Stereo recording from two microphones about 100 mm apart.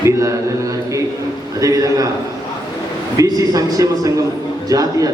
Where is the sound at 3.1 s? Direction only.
40° right (ahead or behind).